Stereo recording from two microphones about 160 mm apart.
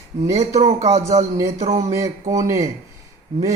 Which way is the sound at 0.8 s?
20° right (ahead or behind).